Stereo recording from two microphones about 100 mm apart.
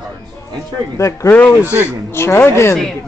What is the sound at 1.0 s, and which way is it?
Speech, 30° left (ahead or behind).